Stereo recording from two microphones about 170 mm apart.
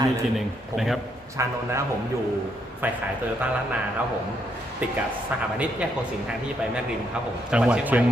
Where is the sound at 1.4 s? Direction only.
15° right (ahead or behind).